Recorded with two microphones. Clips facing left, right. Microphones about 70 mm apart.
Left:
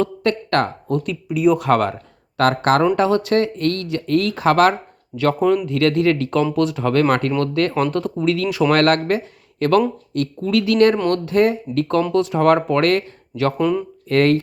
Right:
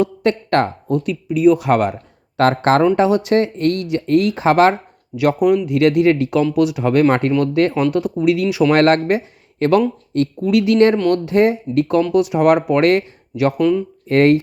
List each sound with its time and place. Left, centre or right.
0.0 s speech: right
0.9 s speech: centre
2.4 s speech: right; by 8.6 s centre
8.7 s speech: right
13.6 s speech: centre
14.1 s speech: right